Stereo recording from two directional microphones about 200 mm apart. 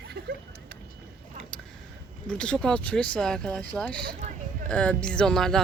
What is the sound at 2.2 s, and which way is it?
Speech, 5° left (ahead or behind).